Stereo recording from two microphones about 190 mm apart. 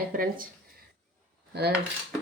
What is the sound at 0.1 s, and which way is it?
Speech, 45° right (ahead or behind).